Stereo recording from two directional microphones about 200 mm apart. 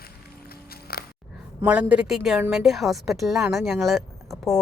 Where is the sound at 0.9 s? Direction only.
50° left (ahead or behind).